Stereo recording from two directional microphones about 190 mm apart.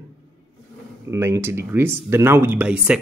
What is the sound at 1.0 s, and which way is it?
Speech, 15° right (ahead or behind).